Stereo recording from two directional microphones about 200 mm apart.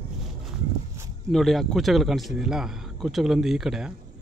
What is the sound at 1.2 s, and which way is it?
Speech, centre (ahead or behind).